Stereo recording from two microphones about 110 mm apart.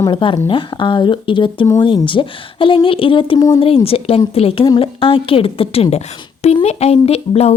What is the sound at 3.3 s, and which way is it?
Speech, 30° left (ahead or behind).